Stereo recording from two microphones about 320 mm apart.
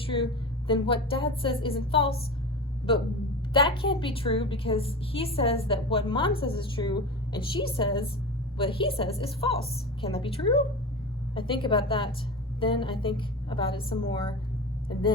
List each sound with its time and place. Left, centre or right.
0.0 s a sound: centre
0.7 s a woman's voice: centre
3.5 s a woman's voice: centre